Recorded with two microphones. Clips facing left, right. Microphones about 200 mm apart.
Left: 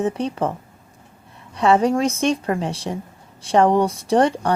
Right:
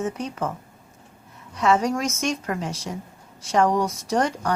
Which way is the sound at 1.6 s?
30° left (ahead or behind).